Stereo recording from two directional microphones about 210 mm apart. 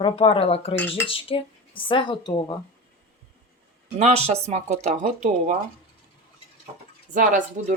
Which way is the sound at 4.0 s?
30° right (ahead or behind).